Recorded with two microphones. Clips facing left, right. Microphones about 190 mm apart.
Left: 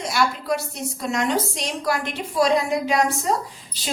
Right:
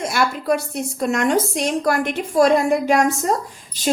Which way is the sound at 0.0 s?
50° right (ahead or behind).